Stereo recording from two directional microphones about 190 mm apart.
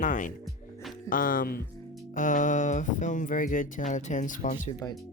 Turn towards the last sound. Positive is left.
turn(degrees=40)  # may be behind; listen again after turning